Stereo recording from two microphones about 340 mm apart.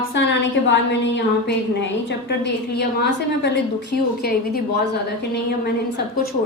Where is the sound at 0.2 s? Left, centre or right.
Left.